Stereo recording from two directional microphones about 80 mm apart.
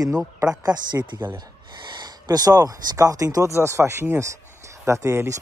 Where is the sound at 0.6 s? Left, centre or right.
Right.